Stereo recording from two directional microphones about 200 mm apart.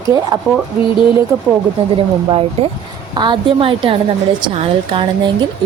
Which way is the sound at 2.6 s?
30° right (ahead or behind).